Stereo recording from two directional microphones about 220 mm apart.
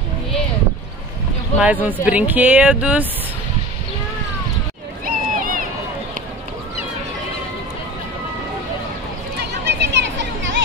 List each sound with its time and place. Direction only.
1.6 s speech: 5° right (ahead or behind)
5.0 s a sound: 40° right (ahead or behind)
9.4 s chatter: 50° right (ahead or behind)